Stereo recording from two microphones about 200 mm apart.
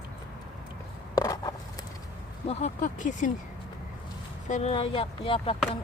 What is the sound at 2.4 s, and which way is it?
Speech, 30° left (ahead or behind).